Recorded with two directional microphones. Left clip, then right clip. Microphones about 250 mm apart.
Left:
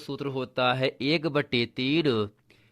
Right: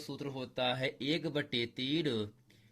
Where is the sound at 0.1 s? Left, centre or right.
Left.